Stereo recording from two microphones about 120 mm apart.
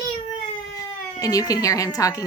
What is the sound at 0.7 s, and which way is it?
Speech, 30° left (ahead or behind).